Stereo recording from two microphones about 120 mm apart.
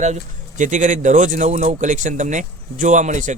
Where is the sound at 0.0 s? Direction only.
85° right.